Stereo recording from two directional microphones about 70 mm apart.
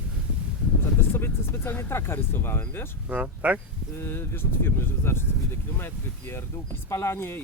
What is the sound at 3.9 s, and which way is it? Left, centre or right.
Speech, left.